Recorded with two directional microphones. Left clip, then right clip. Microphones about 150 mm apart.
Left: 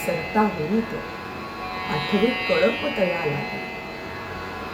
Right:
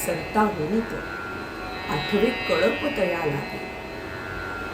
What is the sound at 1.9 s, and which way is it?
Speech, 20° left (ahead or behind).